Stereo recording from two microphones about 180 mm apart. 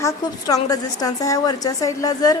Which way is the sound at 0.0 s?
20° left (ahead or behind).